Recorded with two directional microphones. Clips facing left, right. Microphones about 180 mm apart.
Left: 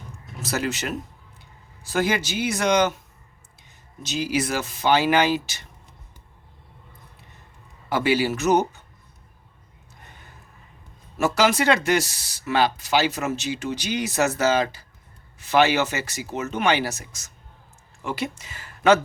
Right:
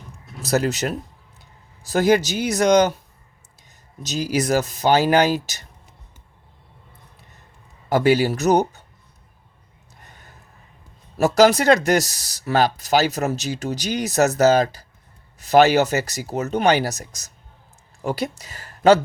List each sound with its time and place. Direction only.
0.4 s speech: 40° right (ahead or behind)
7.9 s speech: 40° right (ahead or behind)
11.2 s speech: 40° right (ahead or behind)